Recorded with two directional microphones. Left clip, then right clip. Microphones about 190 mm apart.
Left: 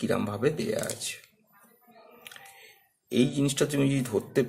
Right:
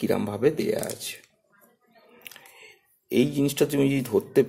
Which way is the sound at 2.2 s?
25° right (ahead or behind).